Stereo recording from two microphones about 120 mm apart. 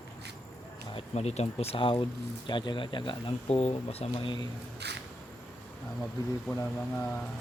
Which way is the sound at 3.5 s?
60° left (ahead or behind).